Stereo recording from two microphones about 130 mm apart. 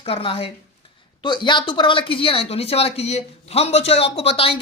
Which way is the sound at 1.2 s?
35° left (ahead or behind).